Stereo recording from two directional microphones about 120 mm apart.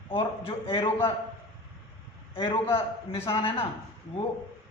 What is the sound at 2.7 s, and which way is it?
Speech, 50° left (ahead or behind).